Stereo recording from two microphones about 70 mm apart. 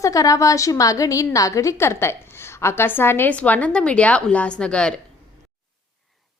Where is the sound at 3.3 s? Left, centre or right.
Left.